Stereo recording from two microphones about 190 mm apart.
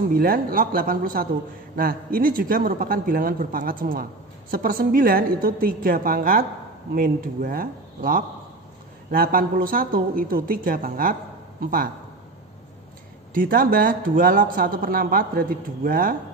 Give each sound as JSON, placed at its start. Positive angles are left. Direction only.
{"t": 0.1, "sound": "speech", "side_deg": -50}
{"t": 13.3, "sound": "speech", "side_deg": -50}